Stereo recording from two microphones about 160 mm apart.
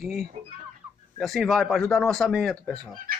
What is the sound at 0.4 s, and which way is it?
Speech, 45° right (ahead or behind).